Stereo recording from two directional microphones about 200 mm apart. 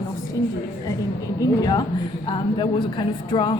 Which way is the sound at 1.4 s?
20° left (ahead or behind).